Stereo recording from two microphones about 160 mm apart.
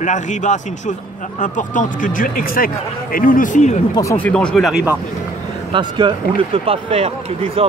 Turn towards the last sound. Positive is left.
turn(degrees=-40)  # may be behind; listen again after turning